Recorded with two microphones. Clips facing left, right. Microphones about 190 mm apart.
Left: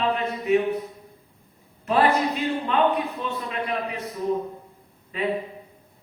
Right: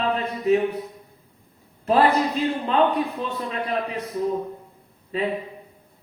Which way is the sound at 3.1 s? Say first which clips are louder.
Right 1 dB; 35° right (ahead or behind).